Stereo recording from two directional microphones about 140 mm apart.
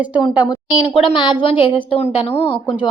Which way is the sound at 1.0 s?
35° left (ahead or behind).